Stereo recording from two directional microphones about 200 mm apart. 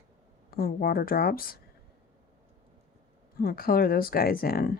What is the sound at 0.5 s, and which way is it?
Speech, 50° left (ahead or behind).